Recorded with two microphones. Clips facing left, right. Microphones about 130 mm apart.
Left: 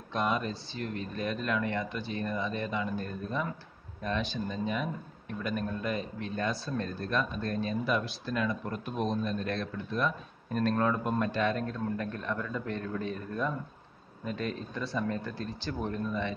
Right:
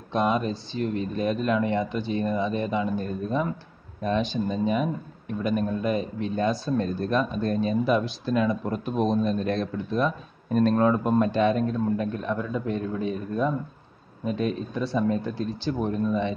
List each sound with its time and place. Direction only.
0.1 s speech: 20° right (ahead or behind)